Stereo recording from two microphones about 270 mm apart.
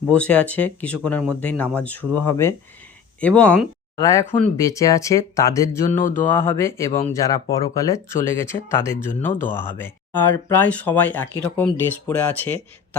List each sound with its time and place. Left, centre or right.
0.1 s speech: centre
5.9 s mantra: left
6.1 s speech: centre